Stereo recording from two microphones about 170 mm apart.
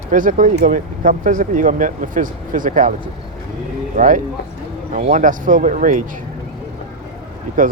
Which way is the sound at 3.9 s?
50° right (ahead or behind).